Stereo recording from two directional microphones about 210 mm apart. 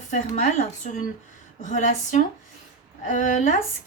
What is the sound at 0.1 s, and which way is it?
Speech, 35° left (ahead or behind).